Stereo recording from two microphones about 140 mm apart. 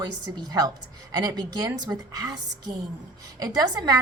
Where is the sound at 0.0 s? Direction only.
25° right (ahead or behind).